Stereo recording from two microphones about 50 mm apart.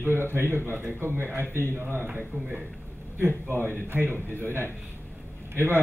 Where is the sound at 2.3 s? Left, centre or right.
Right.